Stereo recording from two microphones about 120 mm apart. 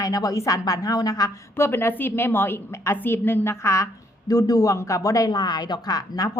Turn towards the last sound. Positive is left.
turn(degrees=30)  # may be behind; listen again after turning